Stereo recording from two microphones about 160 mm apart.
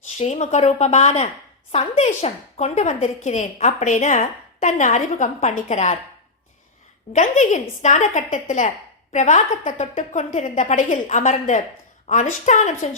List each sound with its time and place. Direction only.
0.2 s a woman's voice: 45° left (ahead or behind)
7.1 s a woman's voice: 45° left (ahead or behind)